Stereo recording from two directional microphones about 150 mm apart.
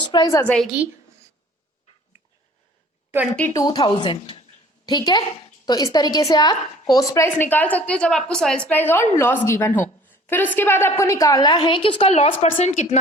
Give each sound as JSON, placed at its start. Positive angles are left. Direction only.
{"t": 0.0, "sound": "a sound", "side_deg": 30}
{"t": 0.3, "sound": "a woman's voice", "side_deg": 20}
{"t": 0.5, "sound": "a woman's voice", "side_deg": 0}
{"t": 3.5, "sound": "a woman's voice", "side_deg": 25}